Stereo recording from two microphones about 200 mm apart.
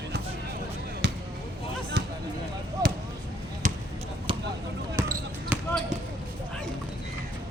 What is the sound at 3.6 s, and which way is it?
Basketball bounce, 40° right (ahead or behind).